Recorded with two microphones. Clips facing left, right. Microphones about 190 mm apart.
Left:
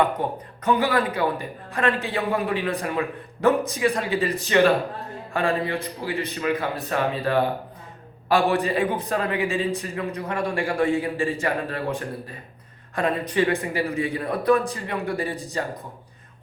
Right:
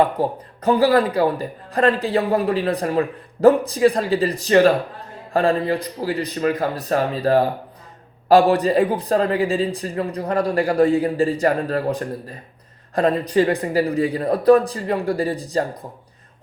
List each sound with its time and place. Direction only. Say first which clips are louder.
0.0 s a man's voice: right 4 dB; 35° right (ahead or behind)